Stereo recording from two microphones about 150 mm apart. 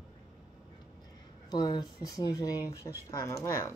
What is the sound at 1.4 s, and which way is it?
Speech, 25° left (ahead or behind).